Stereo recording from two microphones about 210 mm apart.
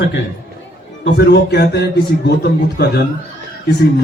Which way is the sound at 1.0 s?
50° left (ahead or behind).